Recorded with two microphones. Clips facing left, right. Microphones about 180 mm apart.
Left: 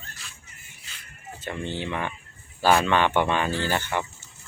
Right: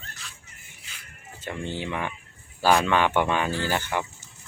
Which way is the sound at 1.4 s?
10° right (ahead or behind).